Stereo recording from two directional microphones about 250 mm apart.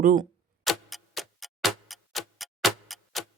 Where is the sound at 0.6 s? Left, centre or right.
Centre.